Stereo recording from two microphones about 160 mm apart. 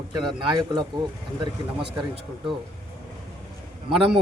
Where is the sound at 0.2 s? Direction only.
30° right (ahead or behind).